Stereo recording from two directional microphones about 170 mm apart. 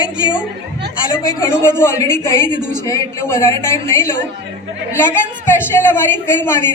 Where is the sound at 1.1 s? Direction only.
20° left (ahead or behind).